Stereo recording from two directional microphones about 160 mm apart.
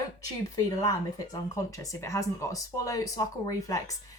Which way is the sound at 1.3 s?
20° left (ahead or behind).